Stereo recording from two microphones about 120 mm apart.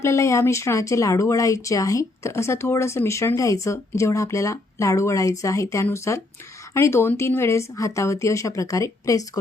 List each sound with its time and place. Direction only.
0.0 s speech: 25° left (ahead or behind)